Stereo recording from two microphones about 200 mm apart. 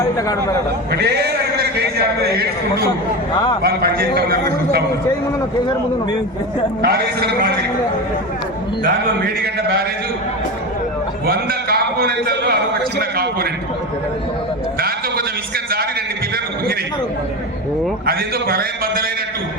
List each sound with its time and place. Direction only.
0.2 s a man's voice: 15° left (ahead or behind)
0.9 s a man's voice: 55° right (ahead or behind)
6.8 s a man's voice: 50° right (ahead or behind)
8.8 s a man's voice: 50° right (ahead or behind)
11.3 s a man's voice: 50° right (ahead or behind)
14.8 s sheep: 50° right (ahead or behind)
18.0 s a man's voice: 50° right (ahead or behind)